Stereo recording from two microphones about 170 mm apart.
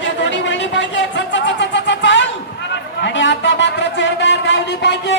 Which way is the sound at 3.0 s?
90° left.